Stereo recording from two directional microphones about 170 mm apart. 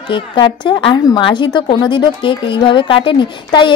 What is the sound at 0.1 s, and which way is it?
A woman's voice, 30° left (ahead or behind).